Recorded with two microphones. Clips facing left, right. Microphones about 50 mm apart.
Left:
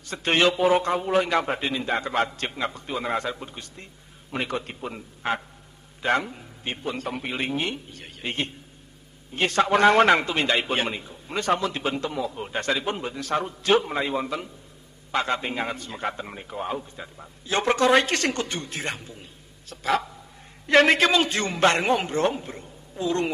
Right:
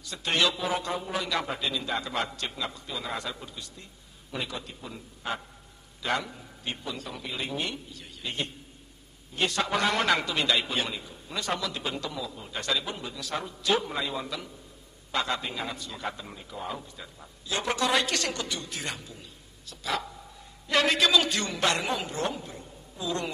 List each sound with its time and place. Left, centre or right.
0.1 s a man's voice: left
7.5 s a man's voice: left
8.0 s a man's voice: left
19.6 s a sound: left
20.6 s a man's voice: left